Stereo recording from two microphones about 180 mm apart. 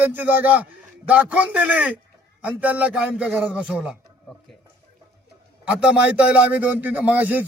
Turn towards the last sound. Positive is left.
turn(degrees=-10)  # may be behind; listen again after turning